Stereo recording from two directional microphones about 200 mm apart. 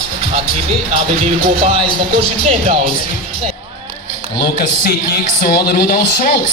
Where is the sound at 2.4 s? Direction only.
30° right (ahead or behind).